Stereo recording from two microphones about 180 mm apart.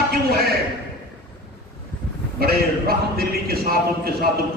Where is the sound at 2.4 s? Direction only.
55° right (ahead or behind).